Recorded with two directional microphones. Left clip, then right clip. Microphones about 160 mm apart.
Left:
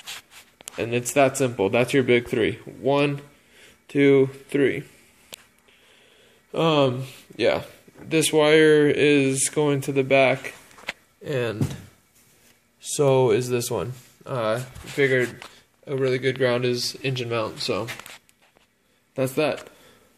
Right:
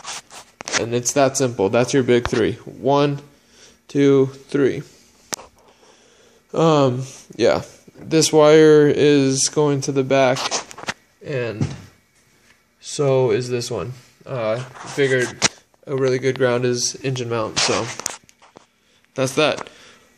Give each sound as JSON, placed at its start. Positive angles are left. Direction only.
{"t": 0.6, "sound": "speech", "side_deg": -25}
{"t": 6.5, "sound": "speech", "side_deg": -40}
{"t": 10.9, "sound": "a sound", "side_deg": 5}
{"t": 12.9, "sound": "speech", "side_deg": 5}
{"t": 15.0, "sound": "speech", "side_deg": -10}
{"t": 19.1, "sound": "speech", "side_deg": 5}